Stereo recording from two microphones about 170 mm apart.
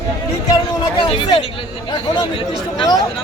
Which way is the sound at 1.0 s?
30° left (ahead or behind).